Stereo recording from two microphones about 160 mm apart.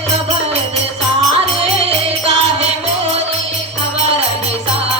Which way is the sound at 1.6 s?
40° right (ahead or behind).